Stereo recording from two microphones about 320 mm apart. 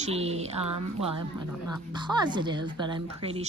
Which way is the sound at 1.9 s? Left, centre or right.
Centre.